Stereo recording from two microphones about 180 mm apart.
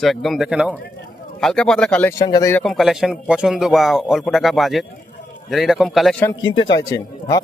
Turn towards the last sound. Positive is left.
turn(degrees=20)  # may be behind; listen again after turning